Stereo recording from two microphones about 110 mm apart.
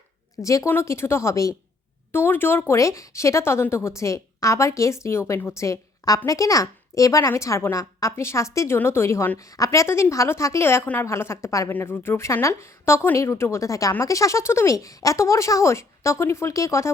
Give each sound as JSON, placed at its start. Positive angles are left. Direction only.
{"t": 0.4, "sound": "a woman's voice", "side_deg": 30}